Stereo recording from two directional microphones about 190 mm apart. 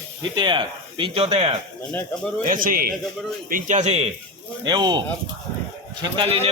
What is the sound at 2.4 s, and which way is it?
A man's voice, 45° right (ahead or behind).